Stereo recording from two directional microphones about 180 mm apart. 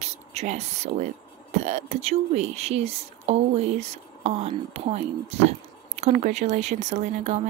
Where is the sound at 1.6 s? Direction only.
40° right (ahead or behind).